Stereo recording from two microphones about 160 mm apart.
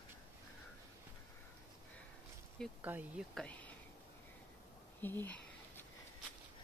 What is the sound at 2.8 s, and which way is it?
Speech, 10° right (ahead or behind).